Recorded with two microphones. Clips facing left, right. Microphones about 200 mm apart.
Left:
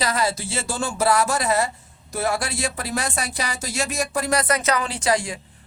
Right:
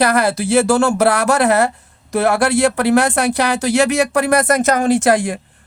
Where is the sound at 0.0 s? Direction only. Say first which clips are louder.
Right 8 dB; 65° right (ahead or behind).